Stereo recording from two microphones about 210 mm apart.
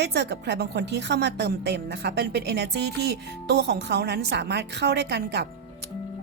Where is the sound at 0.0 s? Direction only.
55° right (ahead or behind).